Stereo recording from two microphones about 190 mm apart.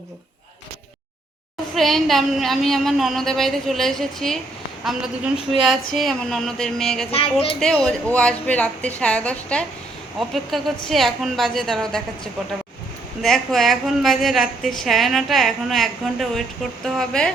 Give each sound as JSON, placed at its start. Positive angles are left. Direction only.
{"t": 1.7, "sound": "a woman's voice", "side_deg": 0}
{"t": 7.1, "sound": "speech", "side_deg": 30}
{"t": 7.9, "sound": "a woman's voice", "side_deg": 5}
{"t": 13.2, "sound": "a woman's voice", "side_deg": 0}